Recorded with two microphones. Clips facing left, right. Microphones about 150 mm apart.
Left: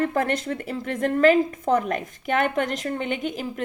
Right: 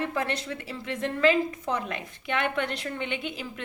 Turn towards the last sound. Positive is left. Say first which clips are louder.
# left 6 dB
turn(degrees=45)  # may be behind; listen again after turning